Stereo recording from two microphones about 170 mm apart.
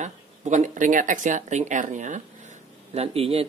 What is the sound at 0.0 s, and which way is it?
Speech, 45° right (ahead or behind).